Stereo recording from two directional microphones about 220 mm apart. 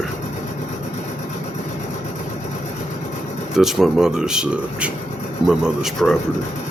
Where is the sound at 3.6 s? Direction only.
Centre (ahead or behind).